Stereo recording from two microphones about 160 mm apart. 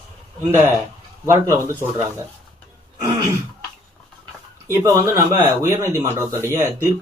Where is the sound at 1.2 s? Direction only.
20° right (ahead or behind).